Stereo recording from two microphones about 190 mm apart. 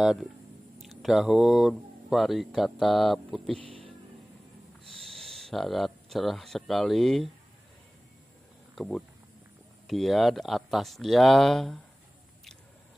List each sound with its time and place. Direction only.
0.0 s speech: centre (ahead or behind)
3.6 s a sound: 30° right (ahead or behind)
4.8 s speech: centre (ahead or behind)
8.7 s speech: 5° left (ahead or behind)